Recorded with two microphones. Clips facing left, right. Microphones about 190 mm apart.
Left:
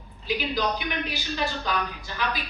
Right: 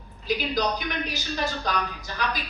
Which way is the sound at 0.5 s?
40° right (ahead or behind).